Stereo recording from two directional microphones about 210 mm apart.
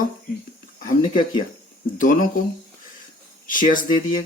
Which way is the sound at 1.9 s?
40° left (ahead or behind).